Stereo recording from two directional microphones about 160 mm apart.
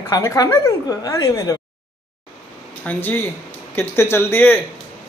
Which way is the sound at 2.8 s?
10° left (ahead or behind).